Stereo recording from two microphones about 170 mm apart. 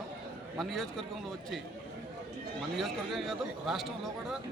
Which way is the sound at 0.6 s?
Centre (ahead or behind).